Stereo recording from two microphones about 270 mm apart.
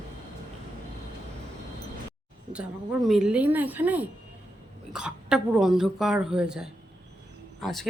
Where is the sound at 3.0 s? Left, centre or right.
Centre.